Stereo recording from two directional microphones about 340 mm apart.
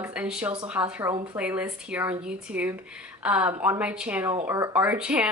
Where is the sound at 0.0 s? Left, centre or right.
Centre.